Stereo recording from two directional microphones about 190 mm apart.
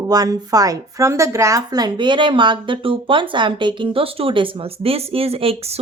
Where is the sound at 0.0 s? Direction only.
20° right (ahead or behind).